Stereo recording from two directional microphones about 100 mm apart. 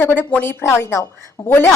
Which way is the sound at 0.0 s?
20° left (ahead or behind).